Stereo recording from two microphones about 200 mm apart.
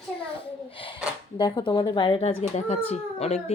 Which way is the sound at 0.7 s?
25° left (ahead or behind).